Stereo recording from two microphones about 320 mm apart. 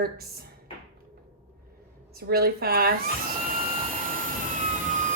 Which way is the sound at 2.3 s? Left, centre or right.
Right.